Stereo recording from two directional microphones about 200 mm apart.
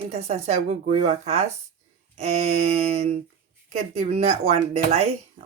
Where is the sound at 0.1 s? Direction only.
30° right (ahead or behind).